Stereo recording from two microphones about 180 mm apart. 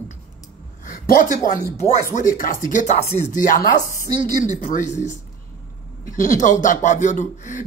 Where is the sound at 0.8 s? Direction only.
45° left (ahead or behind).